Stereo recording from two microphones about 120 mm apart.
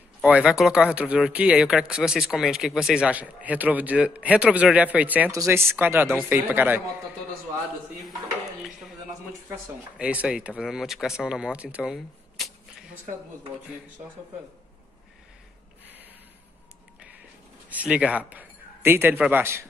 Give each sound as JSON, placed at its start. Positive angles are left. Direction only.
{"t": 0.2, "sound": "speech", "side_deg": -10}
{"t": 5.3, "sound": "speech", "side_deg": -25}
{"t": 9.9, "sound": "speech", "side_deg": -10}
{"t": 17.6, "sound": "a man's voice", "side_deg": -10}